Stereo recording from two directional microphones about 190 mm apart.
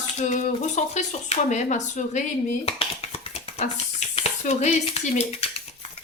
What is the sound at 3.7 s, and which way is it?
Speech, 35° left (ahead or behind).